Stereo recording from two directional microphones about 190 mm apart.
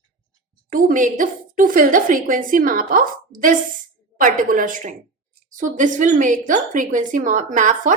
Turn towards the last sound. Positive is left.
turn(degrees=-45)  # may be behind; listen again after turning